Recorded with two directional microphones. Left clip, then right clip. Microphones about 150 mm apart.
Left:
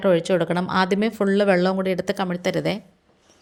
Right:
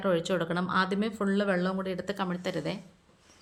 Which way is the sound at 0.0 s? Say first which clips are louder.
Left 9 dB; 35° left (ahead or behind).